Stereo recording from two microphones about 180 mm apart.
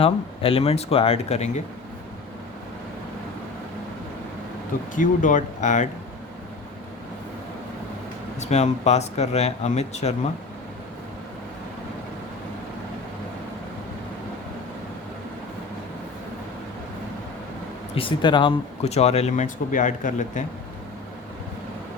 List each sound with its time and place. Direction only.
0.0 s speech: 30° left (ahead or behind)
4.9 s speech: 45° left (ahead or behind)
8.4 s speech: 40° left (ahead or behind)
17.9 s speech: 25° left (ahead or behind); by 20.4 s 45° left (ahead or behind)